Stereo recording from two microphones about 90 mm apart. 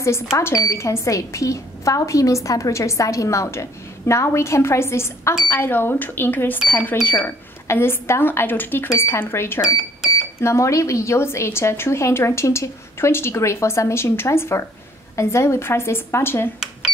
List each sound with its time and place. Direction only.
0.0 s speech: 30° left (ahead or behind)